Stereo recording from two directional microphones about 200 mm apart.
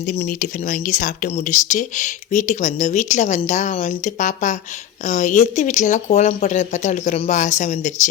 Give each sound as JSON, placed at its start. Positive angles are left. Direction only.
{"t": 0.2, "sound": "speech", "side_deg": 45}